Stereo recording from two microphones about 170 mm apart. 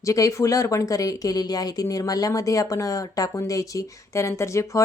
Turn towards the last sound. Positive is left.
turn(degrees=15)  # may be behind; listen again after turning